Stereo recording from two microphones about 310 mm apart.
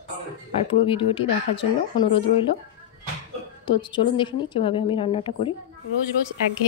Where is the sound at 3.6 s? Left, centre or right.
Centre.